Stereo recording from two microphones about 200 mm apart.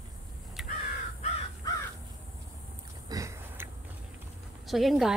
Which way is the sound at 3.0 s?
15° right (ahead or behind).